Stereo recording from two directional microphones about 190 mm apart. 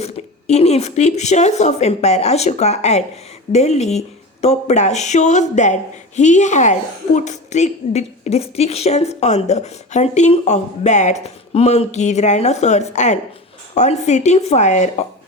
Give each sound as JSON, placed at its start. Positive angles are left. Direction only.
{"t": 0.0, "sound": "a woman's voice", "side_deg": 35}